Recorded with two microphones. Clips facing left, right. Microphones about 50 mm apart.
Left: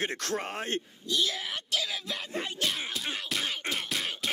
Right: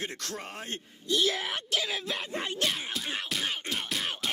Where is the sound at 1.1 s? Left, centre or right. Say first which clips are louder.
Right 3 dB; right.